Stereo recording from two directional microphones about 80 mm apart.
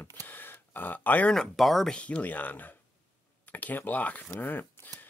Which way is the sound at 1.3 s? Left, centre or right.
Centre.